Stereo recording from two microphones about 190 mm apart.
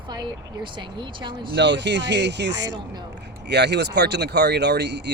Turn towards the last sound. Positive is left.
turn(degrees=-65)  # may be behind; listen again after turning